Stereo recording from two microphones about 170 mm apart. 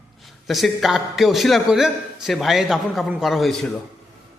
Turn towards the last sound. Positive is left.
turn(degrees=0)  # may be behind; listen again after turning